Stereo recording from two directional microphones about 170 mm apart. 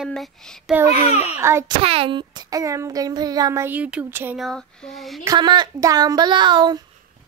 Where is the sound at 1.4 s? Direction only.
15° right (ahead or behind).